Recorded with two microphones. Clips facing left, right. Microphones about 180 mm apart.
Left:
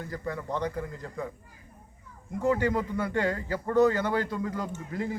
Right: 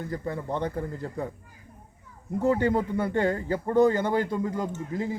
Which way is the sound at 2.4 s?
30° right (ahead or behind).